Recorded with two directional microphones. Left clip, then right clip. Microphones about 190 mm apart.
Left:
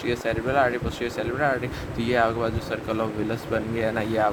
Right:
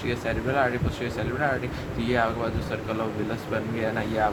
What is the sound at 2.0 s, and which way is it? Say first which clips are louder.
Speech: left 3 dB; 60° left (ahead or behind).